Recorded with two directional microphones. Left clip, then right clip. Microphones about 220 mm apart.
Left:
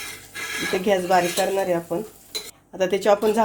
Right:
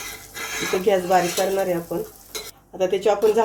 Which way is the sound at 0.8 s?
40° left (ahead or behind).